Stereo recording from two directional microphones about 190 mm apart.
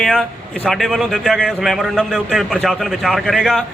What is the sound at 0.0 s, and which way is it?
Speech, centre (ahead or behind).